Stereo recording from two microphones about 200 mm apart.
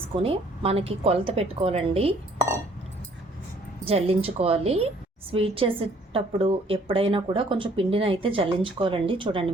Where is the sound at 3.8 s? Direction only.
30° right (ahead or behind).